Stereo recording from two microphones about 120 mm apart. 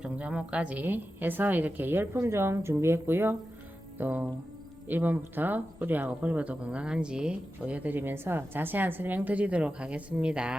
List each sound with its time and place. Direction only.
0.0 s a woman's voice: 10° right (ahead or behind)